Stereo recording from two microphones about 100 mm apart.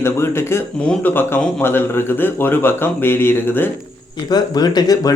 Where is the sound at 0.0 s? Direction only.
25° left (ahead or behind).